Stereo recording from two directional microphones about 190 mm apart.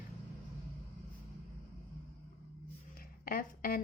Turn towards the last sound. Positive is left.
turn(degrees=50)  # may be behind; listen again after turning